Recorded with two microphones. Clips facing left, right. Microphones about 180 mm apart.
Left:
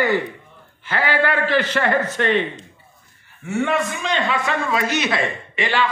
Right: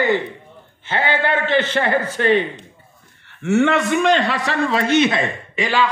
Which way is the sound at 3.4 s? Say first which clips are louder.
Right 5 dB; 80° right.